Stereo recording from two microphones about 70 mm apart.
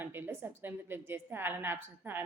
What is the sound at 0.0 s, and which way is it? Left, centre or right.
A woman's voice, right.